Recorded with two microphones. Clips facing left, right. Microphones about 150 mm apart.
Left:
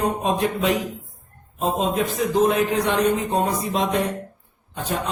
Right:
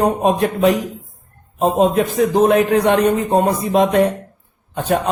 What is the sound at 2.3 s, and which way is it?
A man's voice, 65° right (ahead or behind).